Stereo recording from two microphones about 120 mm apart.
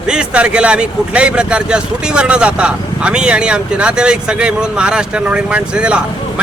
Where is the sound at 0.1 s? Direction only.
10° right (ahead or behind).